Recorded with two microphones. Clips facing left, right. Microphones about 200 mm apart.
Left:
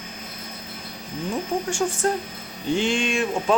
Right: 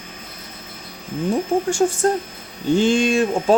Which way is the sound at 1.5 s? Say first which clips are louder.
Right 6 dB; 35° right (ahead or behind).